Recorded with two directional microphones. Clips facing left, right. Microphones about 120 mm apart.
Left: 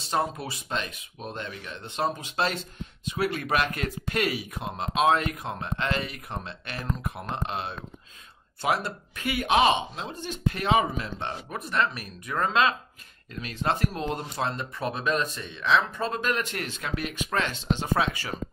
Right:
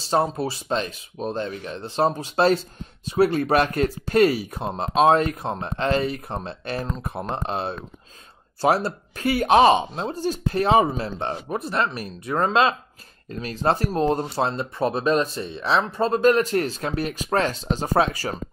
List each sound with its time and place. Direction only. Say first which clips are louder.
0.0 s speech: right 6 dB; 30° right (ahead or behind)